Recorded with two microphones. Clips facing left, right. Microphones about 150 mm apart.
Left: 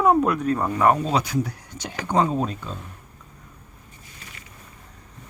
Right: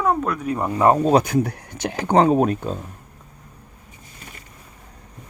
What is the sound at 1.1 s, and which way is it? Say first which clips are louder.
Speech: right 6 dB; 50° right (ahead or behind).